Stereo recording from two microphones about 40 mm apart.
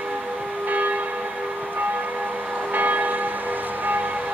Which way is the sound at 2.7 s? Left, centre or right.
Right.